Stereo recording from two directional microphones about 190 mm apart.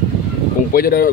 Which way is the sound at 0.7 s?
50° left (ahead or behind).